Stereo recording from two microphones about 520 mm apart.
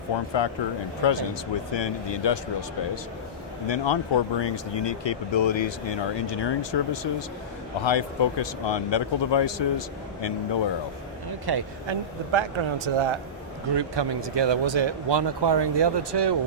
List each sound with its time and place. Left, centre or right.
0.1 s speech: left
11.3 s speech: right
13.7 s speech: right